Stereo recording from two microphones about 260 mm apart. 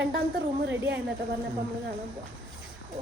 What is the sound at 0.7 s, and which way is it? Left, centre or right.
Speech, right.